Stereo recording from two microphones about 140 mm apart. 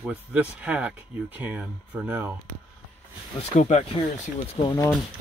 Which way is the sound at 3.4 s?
55° left (ahead or behind).